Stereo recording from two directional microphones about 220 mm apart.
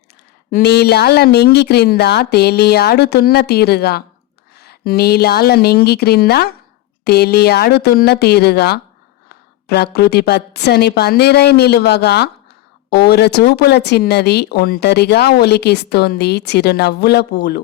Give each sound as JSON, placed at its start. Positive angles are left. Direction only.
{"t": 0.5, "sound": "speech", "side_deg": 45}